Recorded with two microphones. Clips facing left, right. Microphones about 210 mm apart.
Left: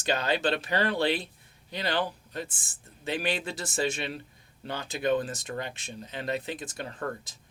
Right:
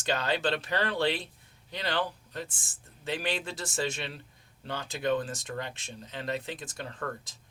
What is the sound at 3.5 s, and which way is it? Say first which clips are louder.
Speech: left 3 dB; 5° left (ahead or behind).